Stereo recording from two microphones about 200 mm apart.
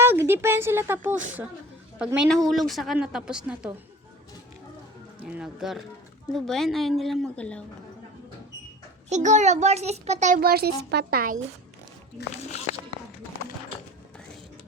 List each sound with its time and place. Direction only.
0.0 s a woman's voice: 10° right (ahead or behind)
5.2 s a woman's voice: 5° right (ahead or behind)
9.0 s a child's voice: 35° right (ahead or behind)
12.5 s speech: 35° left (ahead or behind)